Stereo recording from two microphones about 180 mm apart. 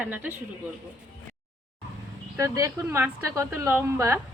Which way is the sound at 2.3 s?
15° right (ahead or behind).